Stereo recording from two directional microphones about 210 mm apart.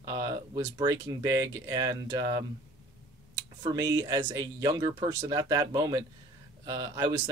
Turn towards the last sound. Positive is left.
turn(degrees=-15)  # may be behind; listen again after turning